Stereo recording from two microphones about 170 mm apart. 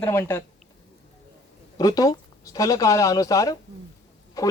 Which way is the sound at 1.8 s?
20° left (ahead or behind).